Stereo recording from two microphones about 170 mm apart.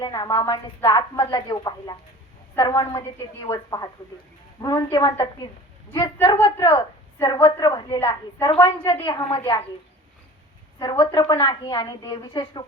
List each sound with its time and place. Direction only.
0.0 s a woman's voice: 25° left (ahead or behind)
8.4 s a woman's voice: 30° left (ahead or behind)
10.9 s a woman's voice: 25° left (ahead or behind)